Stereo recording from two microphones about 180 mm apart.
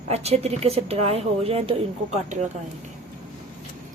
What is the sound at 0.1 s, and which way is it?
A woman's voice, 35° right (ahead or behind).